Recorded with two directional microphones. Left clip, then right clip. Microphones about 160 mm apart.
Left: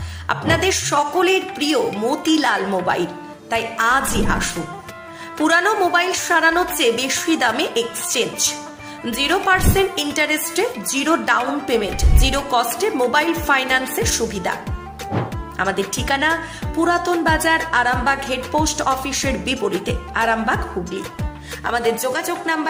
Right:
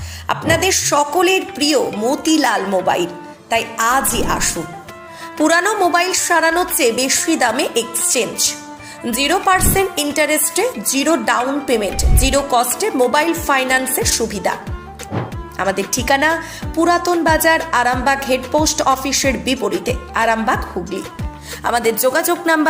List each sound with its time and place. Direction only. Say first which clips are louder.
0.3 s a woman's voice: right 2 dB; 10° right (ahead or behind)
15.5 s a woman's voice: right 2 dB; 15° right (ahead or behind)
21.6 s a woman's voice: right 4 dB; 30° right (ahead or behind)